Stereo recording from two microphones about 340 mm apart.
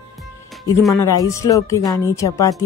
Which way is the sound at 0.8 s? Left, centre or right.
Centre.